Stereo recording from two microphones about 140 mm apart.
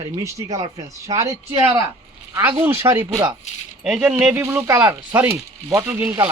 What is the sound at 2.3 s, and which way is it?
A man's voice, 15° right (ahead or behind).